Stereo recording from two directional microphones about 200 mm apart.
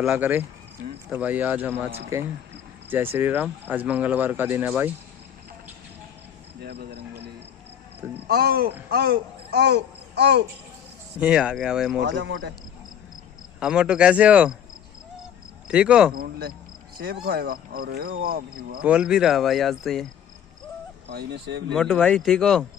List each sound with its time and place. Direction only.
0.0 s speech: 5° right (ahead or behind)
6.6 s cricket: 55° right (ahead or behind)
8.3 s speech: 50° right (ahead or behind)
11.1 s speech: 5° right (ahead or behind)
12.0 s speech: 60° right (ahead or behind)
13.6 s speech: 5° right (ahead or behind)
15.7 s speech: 5° right (ahead or behind)
16.2 s speech: 50° right (ahead or behind)
18.8 s speech: 5° right (ahead or behind)
21.1 s speech: 55° right (ahead or behind)
21.7 s speech: 5° left (ahead or behind)